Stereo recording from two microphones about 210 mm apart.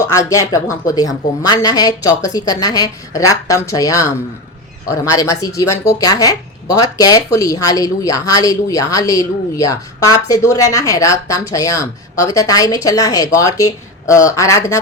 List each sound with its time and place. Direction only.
0.1 s speech: 15° left (ahead or behind)